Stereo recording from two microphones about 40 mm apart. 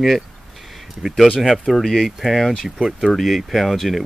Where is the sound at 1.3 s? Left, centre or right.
Centre.